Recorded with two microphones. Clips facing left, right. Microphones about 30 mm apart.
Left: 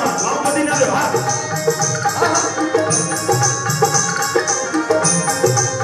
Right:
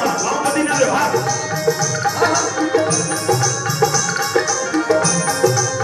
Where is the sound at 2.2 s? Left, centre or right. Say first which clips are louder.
Even; centre.